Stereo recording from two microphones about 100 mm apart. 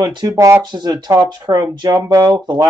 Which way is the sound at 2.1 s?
30° right (ahead or behind).